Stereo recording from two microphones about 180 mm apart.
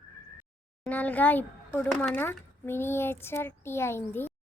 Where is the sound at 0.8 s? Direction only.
10° left (ahead or behind).